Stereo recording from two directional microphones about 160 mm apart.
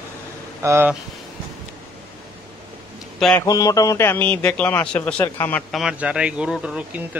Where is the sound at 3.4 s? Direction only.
20° left (ahead or behind).